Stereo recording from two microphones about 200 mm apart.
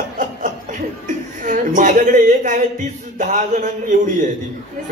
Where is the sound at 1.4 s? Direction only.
40° right (ahead or behind).